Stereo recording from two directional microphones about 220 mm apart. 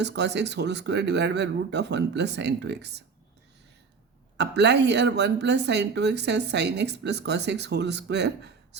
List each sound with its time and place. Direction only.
0.0 s a woman's voice: 50° right (ahead or behind)
4.4 s a woman's voice: 50° right (ahead or behind)